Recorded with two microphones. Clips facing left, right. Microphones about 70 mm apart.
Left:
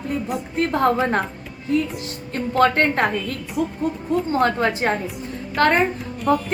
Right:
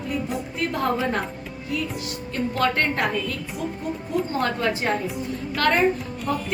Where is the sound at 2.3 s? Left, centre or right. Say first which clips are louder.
Left 5 dB; left.